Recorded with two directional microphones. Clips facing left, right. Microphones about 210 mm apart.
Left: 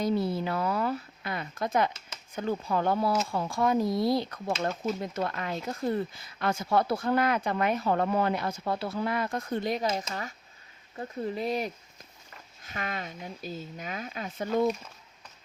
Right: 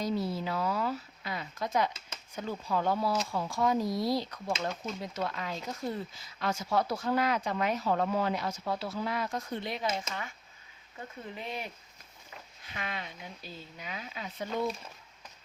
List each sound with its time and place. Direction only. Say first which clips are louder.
0.0 s speech: left 4 dB; 55° left (ahead or behind)